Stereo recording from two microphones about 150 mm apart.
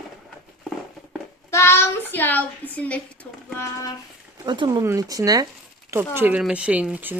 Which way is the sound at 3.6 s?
20° left (ahead or behind).